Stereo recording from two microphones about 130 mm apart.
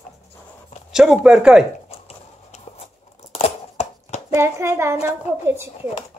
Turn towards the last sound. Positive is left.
turn(degrees=-20)  # may be behind; listen again after turning